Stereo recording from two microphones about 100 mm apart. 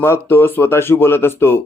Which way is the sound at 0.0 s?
20° left (ahead or behind).